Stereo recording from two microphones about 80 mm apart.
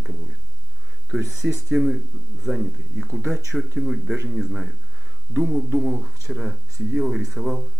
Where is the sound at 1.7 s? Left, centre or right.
Centre.